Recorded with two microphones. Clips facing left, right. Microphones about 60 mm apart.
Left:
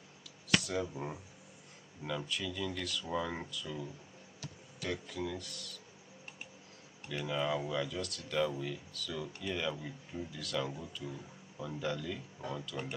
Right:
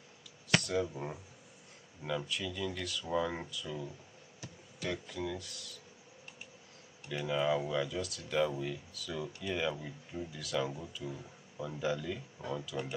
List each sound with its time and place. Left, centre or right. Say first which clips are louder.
0.6 s speech: right 2 dB; centre
7.1 s speech: right 3 dB; centre